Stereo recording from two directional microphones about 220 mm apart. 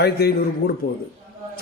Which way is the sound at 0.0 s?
45° left (ahead or behind).